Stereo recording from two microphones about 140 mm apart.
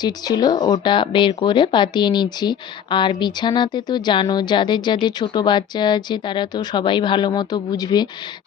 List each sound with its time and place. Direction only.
0.0 s speech: 30° left (ahead or behind)